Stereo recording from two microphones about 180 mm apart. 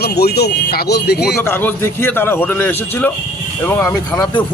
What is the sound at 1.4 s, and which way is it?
A man's voice, 10° left (ahead or behind).